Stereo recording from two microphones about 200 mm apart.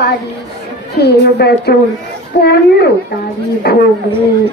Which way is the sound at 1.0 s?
55° left (ahead or behind).